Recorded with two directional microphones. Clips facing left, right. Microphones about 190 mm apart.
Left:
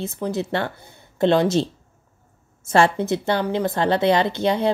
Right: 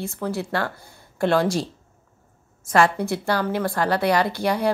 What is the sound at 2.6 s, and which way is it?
A woman's voice, 25° left (ahead or behind).